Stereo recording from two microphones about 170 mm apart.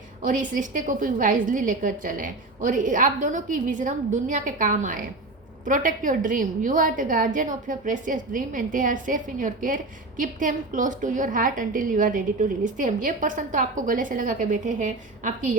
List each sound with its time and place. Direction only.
0.2 s a woman's voice: 50° right (ahead or behind)